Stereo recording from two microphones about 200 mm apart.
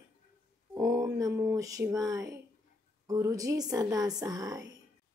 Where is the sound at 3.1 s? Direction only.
15° right (ahead or behind).